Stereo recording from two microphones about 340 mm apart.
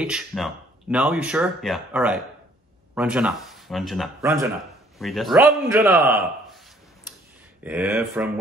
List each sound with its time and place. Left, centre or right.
0.0 s a man's voice: centre
7.6 s speech: centre